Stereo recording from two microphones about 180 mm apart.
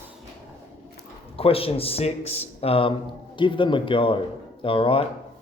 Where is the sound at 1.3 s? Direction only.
30° left (ahead or behind).